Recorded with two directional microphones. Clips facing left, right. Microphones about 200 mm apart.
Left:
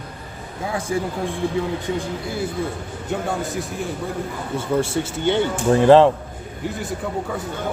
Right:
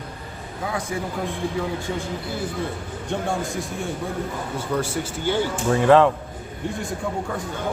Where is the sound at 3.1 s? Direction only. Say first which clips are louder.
Left 1 dB; 5° left (ahead or behind).